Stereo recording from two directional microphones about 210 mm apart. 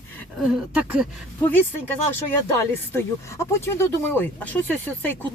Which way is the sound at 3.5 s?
10° left (ahead or behind).